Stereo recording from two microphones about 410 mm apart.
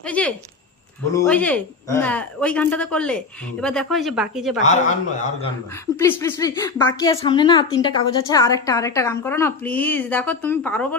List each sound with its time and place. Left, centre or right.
0.0 s speech: centre
4.6 s a woman's voice: centre
5.8 s a woman's voice: centre